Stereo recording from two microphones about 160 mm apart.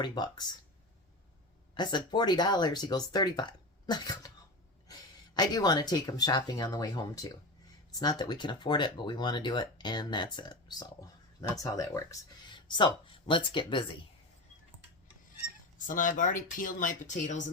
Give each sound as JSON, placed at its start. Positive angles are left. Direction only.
{"t": 0.0, "sound": "speech", "side_deg": 25}
{"t": 1.7, "sound": "speech", "side_deg": 30}
{"t": 15.9, "sound": "speech", "side_deg": 55}